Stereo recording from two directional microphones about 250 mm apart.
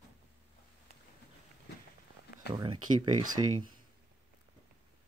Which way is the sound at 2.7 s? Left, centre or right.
Right.